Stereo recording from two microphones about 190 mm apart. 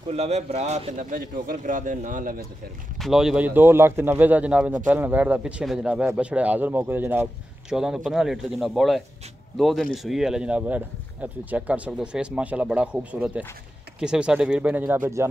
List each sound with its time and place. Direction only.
0.1 s speech: 35° right (ahead or behind)
3.0 s speech: 5° right (ahead or behind)